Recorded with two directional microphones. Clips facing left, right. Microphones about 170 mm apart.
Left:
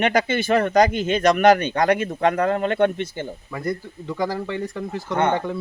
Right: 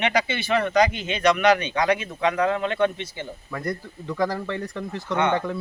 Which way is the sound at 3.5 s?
5° left (ahead or behind).